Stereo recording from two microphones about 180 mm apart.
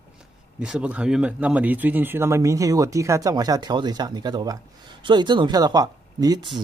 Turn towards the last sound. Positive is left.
turn(degrees=-25)  # may be behind; listen again after turning